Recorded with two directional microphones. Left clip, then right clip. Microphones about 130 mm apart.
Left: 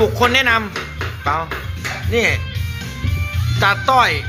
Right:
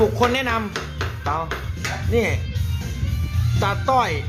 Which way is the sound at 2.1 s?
10° right (ahead or behind).